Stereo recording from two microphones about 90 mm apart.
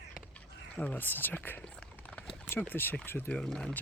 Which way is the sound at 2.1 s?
5° left (ahead or behind).